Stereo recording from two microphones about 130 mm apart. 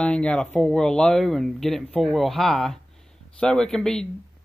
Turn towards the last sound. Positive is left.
turn(degrees=5)  # may be behind; listen again after turning